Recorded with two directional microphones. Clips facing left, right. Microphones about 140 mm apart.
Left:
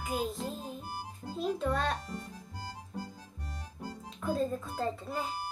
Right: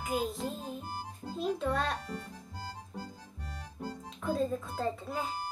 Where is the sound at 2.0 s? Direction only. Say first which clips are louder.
Right 1 dB; 15° left (ahead or behind).